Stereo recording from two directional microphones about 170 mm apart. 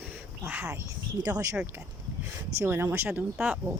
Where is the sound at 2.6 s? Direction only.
15° right (ahead or behind).